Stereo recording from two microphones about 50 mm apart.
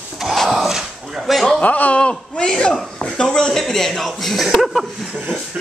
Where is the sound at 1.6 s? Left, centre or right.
Left; by 4.9 s centre.